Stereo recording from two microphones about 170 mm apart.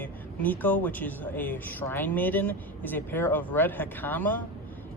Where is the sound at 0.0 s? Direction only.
10° left (ahead or behind).